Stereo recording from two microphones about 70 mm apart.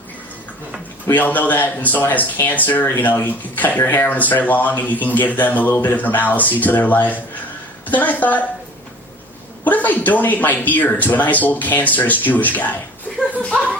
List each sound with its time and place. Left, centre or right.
1.1 s speech: left
9.6 s speech: left
13.1 s chuckle: centre